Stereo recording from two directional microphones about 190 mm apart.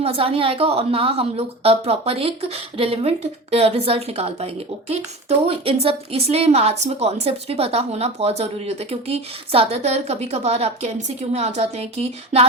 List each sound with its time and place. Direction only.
0.0 s a woman's voice: 30° right (ahead or behind)